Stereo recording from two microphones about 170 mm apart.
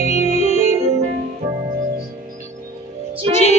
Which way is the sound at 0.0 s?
40° left (ahead or behind).